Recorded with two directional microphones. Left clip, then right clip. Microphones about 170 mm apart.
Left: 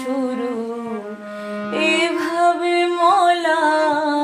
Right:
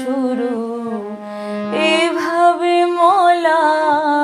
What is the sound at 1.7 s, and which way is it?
Music, 35° right (ahead or behind).